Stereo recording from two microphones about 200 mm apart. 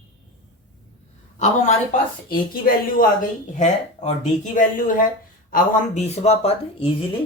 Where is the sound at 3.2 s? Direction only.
40° left (ahead or behind).